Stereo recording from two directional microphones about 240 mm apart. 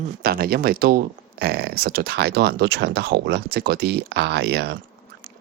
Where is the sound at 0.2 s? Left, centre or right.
Right.